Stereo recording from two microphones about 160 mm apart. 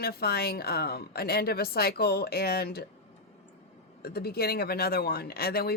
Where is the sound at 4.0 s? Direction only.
75° left (ahead or behind).